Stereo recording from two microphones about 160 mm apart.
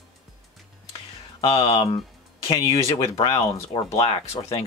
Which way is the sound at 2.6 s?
25° left (ahead or behind).